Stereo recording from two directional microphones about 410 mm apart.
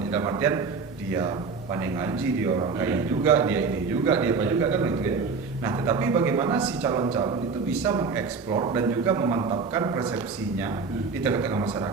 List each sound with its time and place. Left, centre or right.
0.1 s a man's voice: centre
1.7 s a man's voice: centre
11.2 s a man's voice: centre